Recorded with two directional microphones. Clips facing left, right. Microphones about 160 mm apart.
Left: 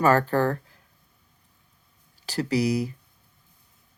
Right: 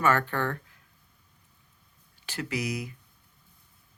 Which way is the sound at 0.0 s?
35° left (ahead or behind).